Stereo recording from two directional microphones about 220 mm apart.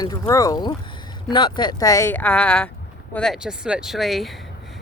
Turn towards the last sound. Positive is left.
turn(degrees=0)  # may be behind; listen again after turning